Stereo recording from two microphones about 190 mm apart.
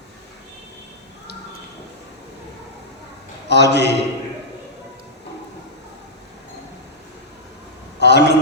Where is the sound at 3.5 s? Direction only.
60° left (ahead or behind).